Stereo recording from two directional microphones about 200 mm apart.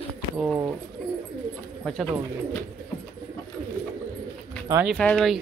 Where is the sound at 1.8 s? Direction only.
Centre (ahead or behind).